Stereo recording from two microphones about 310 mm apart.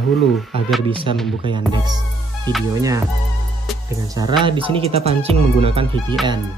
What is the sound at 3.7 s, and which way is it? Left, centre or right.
Speech, centre.